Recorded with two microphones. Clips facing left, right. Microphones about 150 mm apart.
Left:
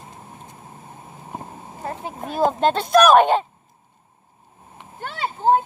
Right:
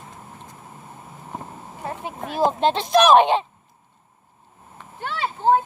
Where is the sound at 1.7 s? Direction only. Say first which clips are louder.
Left 1 dB; 40° left (ahead or behind).